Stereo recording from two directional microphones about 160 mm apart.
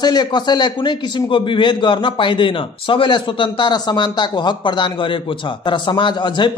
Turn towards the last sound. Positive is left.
turn(degrees=30)  # may be behind; listen again after turning